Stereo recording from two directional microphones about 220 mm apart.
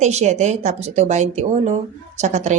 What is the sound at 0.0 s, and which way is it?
Speech, 30° right (ahead or behind).